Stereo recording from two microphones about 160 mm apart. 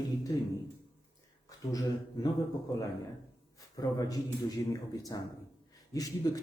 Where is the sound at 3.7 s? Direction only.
25° left (ahead or behind).